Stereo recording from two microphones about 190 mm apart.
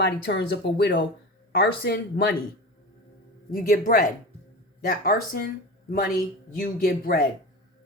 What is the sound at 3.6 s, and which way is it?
Speech, 45° left (ahead or behind).